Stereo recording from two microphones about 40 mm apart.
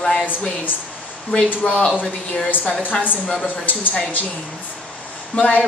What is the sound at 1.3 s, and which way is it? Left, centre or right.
Speech, left.